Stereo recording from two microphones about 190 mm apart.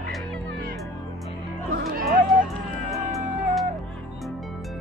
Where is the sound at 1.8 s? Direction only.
50° right (ahead or behind).